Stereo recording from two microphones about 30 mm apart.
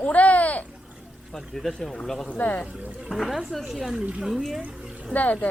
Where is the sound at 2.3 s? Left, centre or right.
Left.